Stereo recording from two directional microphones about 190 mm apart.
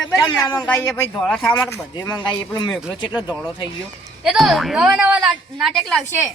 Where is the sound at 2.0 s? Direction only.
20° left (ahead or behind).